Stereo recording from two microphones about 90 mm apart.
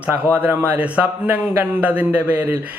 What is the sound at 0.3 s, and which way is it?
Speech, 20° right (ahead or behind).